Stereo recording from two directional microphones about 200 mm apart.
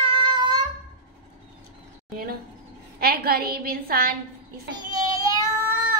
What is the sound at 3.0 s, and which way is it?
A woman's voice, 50° right (ahead or behind).